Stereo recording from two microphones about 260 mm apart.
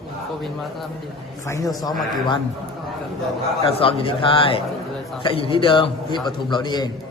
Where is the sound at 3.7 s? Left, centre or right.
Left.